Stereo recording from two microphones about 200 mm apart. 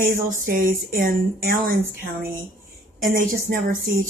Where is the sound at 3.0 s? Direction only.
45° right (ahead or behind).